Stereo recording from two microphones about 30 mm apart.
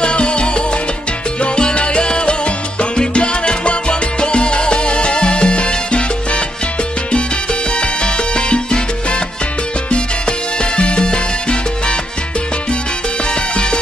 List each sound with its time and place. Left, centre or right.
0.0 s salsa music: left
7.7 s salsa music: left
10.6 s salsa music: left
13.3 s salsa music: left